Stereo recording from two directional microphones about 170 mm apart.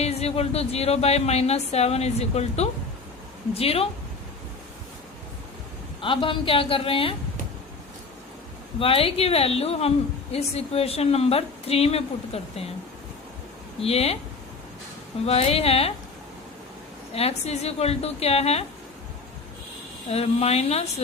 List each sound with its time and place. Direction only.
0.0 s speech: 40° left (ahead or behind)
6.0 s speech: 30° left (ahead or behind)
8.8 s speech: 35° left (ahead or behind)
13.8 s speech: 35° left (ahead or behind)
15.3 s speech: 35° left (ahead or behind)
17.2 s speech: 40° left (ahead or behind)
20.1 s speech: 40° left (ahead or behind)